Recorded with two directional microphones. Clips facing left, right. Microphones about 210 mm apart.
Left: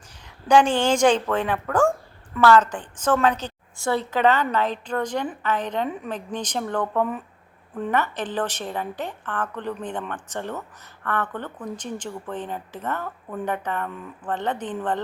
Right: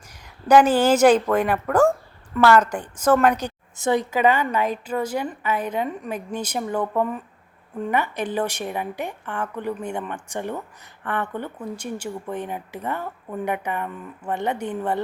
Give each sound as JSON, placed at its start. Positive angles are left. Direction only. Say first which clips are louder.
{"t": 0.4, "sound": "speech", "louder": "right 3 dB", "side_deg": -5}